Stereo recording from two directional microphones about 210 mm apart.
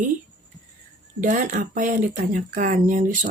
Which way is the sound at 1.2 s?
40° right (ahead or behind).